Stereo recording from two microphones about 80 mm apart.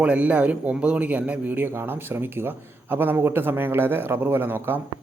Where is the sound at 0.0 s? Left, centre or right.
Centre.